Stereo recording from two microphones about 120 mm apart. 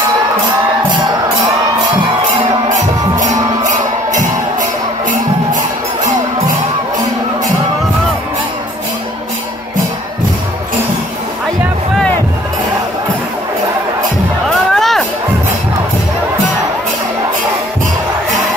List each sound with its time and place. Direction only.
3.2 s music: 90° right
14.7 s music: centre (ahead or behind)